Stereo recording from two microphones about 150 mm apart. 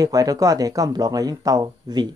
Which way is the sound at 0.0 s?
25° right (ahead or behind).